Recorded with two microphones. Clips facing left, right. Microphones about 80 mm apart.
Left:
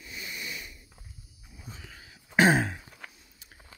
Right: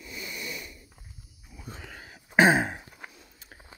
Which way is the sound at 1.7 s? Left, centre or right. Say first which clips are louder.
Right 5 dB; right.